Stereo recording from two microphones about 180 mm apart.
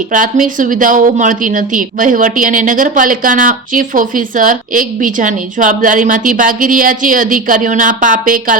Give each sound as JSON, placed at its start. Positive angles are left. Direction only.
{"t": 0.1, "sound": "speech", "side_deg": -50}